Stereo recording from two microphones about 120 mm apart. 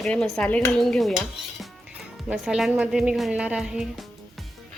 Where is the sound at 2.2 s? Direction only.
5° right (ahead or behind).